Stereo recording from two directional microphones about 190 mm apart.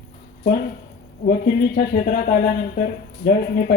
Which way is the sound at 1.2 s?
50° left (ahead or behind).